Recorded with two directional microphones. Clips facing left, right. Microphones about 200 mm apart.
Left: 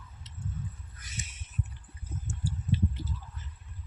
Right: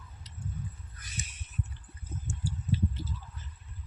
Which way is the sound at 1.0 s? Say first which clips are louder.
Right 1 dB; 25° left (ahead or behind).